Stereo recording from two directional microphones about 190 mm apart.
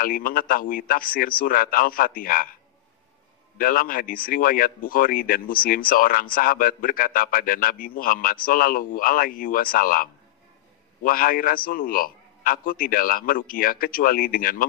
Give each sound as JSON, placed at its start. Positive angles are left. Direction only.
{"t": 0.0, "sound": "a man's voice", "side_deg": 50}
{"t": 3.5, "sound": "a man's voice", "side_deg": 50}